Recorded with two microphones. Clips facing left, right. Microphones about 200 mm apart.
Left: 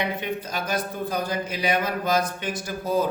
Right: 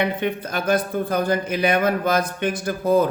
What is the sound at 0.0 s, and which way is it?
Speech, 55° right (ahead or behind).